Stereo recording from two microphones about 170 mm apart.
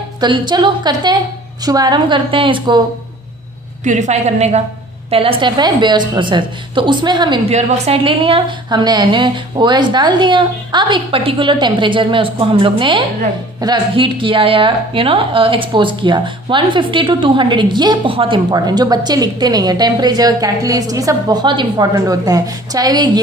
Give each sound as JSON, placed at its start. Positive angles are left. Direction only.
{"t": 0.2, "sound": "a woman's voice", "side_deg": -25}
{"t": 3.8, "sound": "a woman's voice", "side_deg": -45}